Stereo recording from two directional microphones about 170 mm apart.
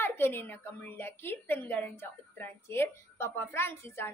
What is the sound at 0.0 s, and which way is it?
A woman's voice, 10° left (ahead or behind).